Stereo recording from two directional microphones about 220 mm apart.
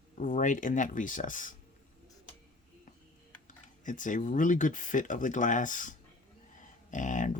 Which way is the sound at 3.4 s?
35° left (ahead or behind).